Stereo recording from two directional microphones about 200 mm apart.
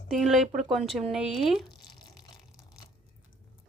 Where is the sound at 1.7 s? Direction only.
20° left (ahead or behind).